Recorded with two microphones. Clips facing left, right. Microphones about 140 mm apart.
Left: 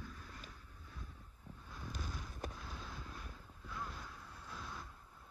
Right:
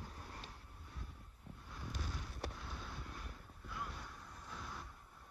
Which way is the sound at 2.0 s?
10° right (ahead or behind).